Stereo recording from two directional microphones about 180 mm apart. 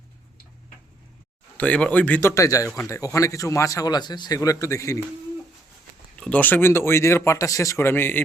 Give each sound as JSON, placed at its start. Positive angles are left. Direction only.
{"t": 1.5, "sound": "speech", "side_deg": 5}
{"t": 6.1, "sound": "speech", "side_deg": 5}